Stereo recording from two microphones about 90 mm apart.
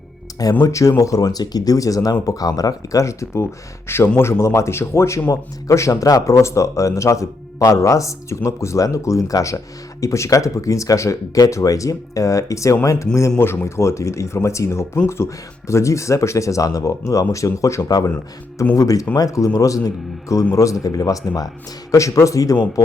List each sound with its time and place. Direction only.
0.6 s a man's voice: 35° left (ahead or behind)